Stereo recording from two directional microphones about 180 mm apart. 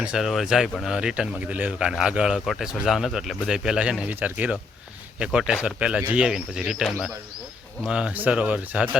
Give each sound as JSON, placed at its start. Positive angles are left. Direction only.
{"t": 0.0, "sound": "speech", "side_deg": -5}